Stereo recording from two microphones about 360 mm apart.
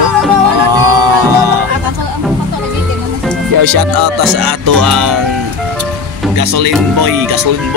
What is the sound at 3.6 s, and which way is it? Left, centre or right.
Music, right.